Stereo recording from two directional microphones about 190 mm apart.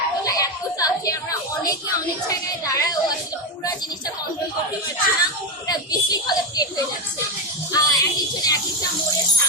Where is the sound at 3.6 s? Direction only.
20° left (ahead or behind).